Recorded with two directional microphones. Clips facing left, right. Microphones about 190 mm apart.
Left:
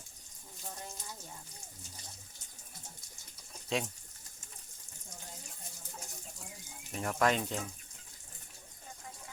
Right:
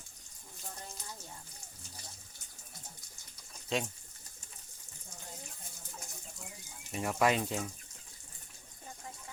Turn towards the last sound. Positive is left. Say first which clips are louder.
# right 1 dB
turn(degrees=-5)  # may be behind; listen again after turning